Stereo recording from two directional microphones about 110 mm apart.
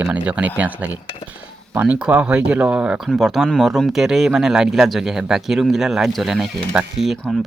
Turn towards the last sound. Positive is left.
turn(degrees=-5)  # may be behind; listen again after turning